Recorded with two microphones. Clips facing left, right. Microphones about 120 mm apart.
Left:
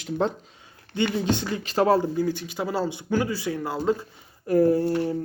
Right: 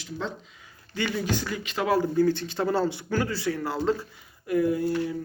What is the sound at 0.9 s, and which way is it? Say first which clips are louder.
Speech: left 4 dB; 25° left (ahead or behind).